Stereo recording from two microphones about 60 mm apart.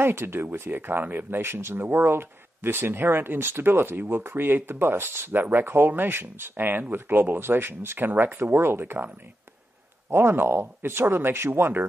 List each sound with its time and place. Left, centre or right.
0.0 s speech: right
10.1 s speech: right